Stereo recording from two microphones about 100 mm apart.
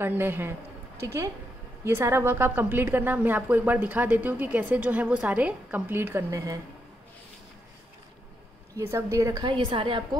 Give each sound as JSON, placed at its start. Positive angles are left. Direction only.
{"t": 0.0, "sound": "a woman's voice", "side_deg": -20}
{"t": 8.7, "sound": "a woman's voice", "side_deg": -30}
{"t": 9.4, "sound": "a woman's voice", "side_deg": -55}